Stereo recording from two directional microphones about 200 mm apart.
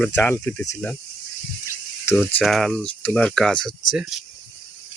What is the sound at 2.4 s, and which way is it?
Speech, centre (ahead or behind).